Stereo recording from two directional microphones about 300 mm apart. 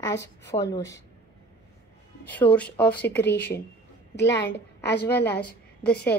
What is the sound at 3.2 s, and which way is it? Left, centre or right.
Speech, left.